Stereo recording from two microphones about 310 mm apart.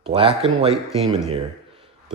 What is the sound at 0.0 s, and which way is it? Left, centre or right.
Speech, centre.